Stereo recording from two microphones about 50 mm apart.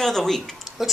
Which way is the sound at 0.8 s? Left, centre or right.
Centre.